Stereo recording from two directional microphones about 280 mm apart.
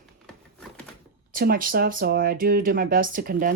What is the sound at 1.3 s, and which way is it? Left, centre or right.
Speech, right.